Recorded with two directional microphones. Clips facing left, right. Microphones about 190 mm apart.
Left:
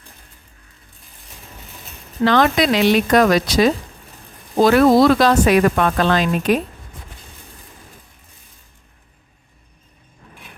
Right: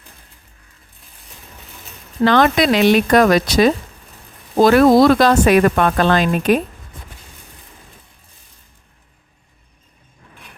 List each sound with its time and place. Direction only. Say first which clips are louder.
2.2 s speech: right 2 dB; 55° right (ahead or behind)